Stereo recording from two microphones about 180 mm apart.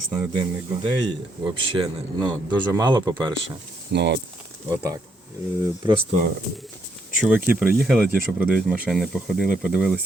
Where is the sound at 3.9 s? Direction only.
70° right (ahead or behind).